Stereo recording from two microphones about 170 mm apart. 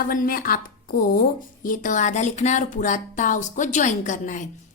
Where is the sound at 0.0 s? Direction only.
55° left (ahead or behind).